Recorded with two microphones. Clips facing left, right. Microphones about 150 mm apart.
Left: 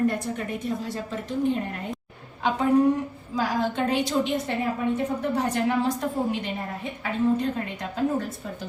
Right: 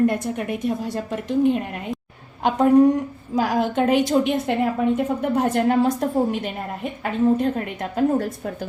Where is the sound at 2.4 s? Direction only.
55° right (ahead or behind).